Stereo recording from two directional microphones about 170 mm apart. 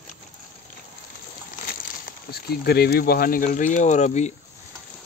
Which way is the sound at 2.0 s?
65° left (ahead or behind).